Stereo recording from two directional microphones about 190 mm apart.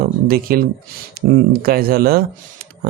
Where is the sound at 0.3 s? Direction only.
50° right (ahead or behind).